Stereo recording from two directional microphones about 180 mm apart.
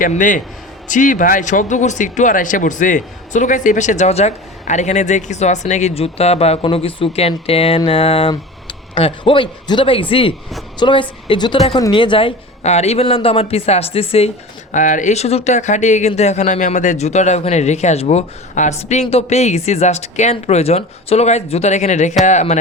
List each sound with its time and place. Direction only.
0.0 s a man's voice: 45° left (ahead or behind)
14.7 s speech: 45° left (ahead or behind)